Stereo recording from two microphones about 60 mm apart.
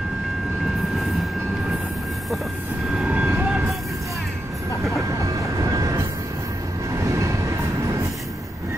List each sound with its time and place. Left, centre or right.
3.1 s train: right
5.6 s train: right
7.0 s vehicle: right